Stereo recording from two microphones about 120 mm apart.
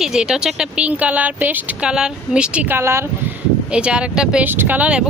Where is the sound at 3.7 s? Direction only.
10° right (ahead or behind).